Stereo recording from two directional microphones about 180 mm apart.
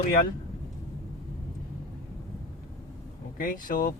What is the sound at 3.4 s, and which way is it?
Speech, 50° left (ahead or behind).